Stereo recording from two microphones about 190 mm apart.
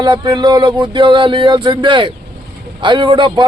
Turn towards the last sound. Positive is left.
turn(degrees=-25)  # may be behind; listen again after turning